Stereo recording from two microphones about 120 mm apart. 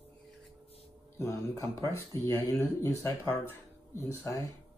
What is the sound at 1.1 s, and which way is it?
Speech, 25° left (ahead or behind).